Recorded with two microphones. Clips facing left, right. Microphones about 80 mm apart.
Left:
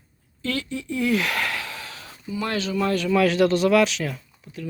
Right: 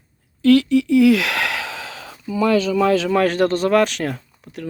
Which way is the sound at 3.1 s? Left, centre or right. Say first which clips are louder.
Right 2 dB; right.